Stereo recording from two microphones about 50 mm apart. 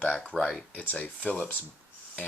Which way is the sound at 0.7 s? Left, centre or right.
Left.